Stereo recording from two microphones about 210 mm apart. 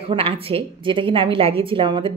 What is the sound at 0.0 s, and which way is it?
Speech, 25° right (ahead or behind).